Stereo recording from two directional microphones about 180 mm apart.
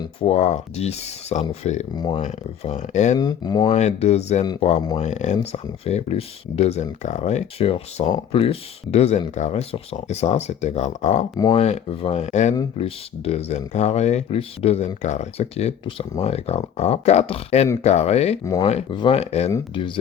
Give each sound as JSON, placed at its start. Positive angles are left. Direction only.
{"t": 0.0, "sound": "speech", "side_deg": 35}
{"t": 2.0, "sound": "speech", "side_deg": 25}
{"t": 2.2, "sound": "speech", "side_deg": 40}
{"t": 3.2, "sound": "speech", "side_deg": 20}
{"t": 3.7, "sound": "speech", "side_deg": 40}
{"t": 19.5, "sound": "speech", "side_deg": 20}